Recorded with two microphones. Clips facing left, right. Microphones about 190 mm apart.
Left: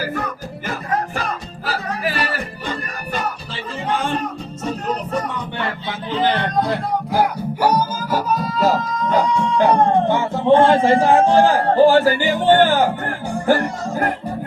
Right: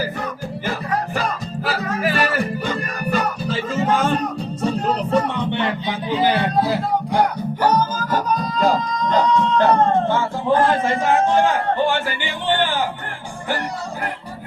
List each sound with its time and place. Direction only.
1.6 s music: 40° left (ahead or behind)
3.5 s music: 45° right (ahead or behind); by 14.1 s 40° left (ahead or behind)